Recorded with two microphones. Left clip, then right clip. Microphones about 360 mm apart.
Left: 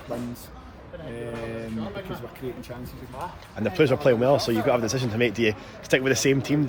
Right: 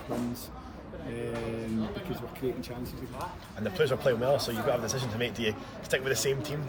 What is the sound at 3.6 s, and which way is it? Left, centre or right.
Speech, centre.